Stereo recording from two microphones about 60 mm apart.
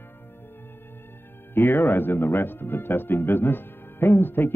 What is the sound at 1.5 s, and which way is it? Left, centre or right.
Speech, left.